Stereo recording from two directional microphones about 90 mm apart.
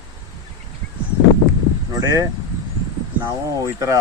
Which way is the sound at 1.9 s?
40° right (ahead or behind).